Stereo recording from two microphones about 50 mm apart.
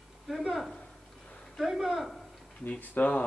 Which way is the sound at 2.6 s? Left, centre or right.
Left.